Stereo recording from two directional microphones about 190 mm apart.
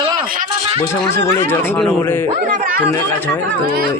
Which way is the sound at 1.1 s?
10° left (ahead or behind).